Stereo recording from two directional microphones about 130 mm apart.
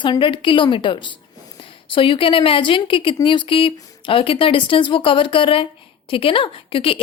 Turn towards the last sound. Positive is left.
turn(degrees=45)  # may be behind; listen again after turning